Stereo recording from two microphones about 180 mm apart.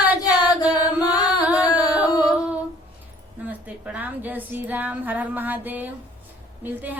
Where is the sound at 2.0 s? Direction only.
20° left (ahead or behind).